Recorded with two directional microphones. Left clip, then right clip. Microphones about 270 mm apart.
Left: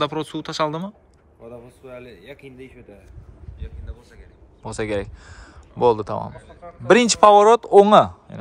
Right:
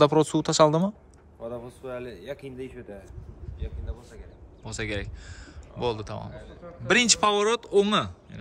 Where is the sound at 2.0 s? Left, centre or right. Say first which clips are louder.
Right 3 dB; right.